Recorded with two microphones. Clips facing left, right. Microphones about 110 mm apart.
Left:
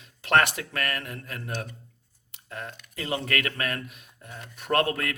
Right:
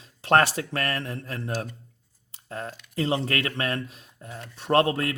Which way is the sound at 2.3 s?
35° right (ahead or behind).